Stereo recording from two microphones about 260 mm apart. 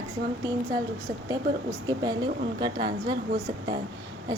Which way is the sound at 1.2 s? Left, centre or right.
Centre.